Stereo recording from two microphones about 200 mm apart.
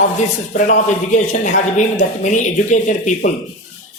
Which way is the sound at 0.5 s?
40° left (ahead or behind).